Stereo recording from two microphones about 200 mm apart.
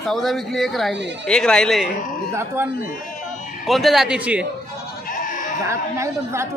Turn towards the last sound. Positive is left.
turn(degrees=-15)  # may be behind; listen again after turning